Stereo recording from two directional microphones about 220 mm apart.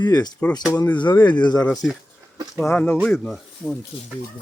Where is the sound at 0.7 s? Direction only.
5° left (ahead or behind).